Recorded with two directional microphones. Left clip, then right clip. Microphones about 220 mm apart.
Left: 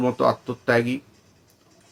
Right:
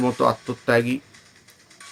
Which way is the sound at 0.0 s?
15° right (ahead or behind).